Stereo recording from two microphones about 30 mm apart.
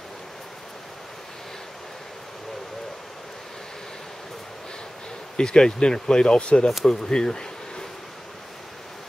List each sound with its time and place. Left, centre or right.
5.4 s speech: left